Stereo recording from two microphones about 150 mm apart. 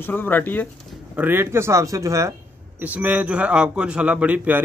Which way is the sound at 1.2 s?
15° right (ahead or behind).